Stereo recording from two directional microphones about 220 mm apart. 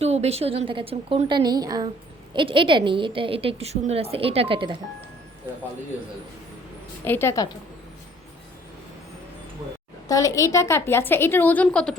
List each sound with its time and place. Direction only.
0.0 s a woman's voice: 30° right (ahead or behind)
7.0 s a woman's voice: 10° left (ahead or behind)
10.1 s a woman's voice: 15° left (ahead or behind)